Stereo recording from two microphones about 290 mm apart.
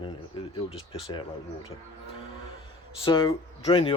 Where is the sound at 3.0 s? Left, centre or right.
Centre.